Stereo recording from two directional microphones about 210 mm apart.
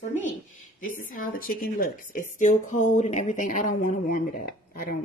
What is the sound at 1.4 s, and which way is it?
Speech, 40° left (ahead or behind).